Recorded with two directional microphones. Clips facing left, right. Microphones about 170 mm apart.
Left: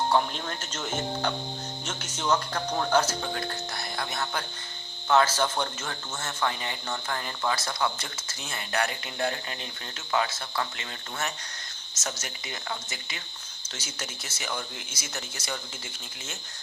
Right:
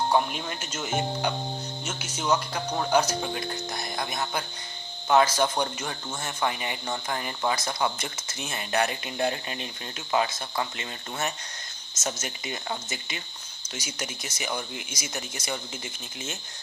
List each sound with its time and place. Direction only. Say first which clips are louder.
0.1 s speech: right 1 dB; 10° right (ahead or behind)